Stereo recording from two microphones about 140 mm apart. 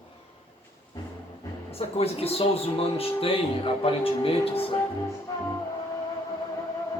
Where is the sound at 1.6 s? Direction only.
45° left (ahead or behind).